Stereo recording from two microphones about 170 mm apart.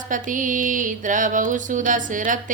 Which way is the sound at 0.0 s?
50° right (ahead or behind).